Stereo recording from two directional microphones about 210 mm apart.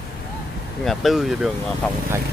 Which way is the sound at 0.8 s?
Centre (ahead or behind).